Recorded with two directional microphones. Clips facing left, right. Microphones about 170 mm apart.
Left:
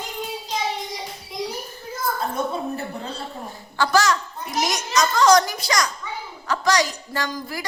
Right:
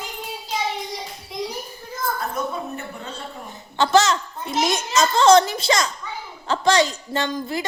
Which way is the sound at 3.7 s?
25° right (ahead or behind).